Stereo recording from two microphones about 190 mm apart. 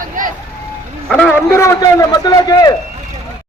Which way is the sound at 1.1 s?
5° left (ahead or behind).